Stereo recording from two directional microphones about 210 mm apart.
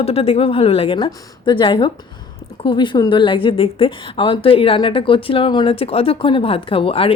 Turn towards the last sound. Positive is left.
turn(degrees=25)  # may be behind; listen again after turning